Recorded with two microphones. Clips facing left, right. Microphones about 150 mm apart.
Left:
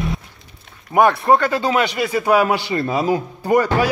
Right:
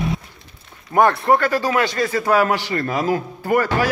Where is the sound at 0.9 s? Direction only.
20° left (ahead or behind).